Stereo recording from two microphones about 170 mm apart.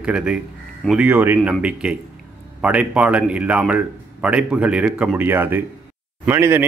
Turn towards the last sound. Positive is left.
turn(degrees=-15)  # may be behind; listen again after turning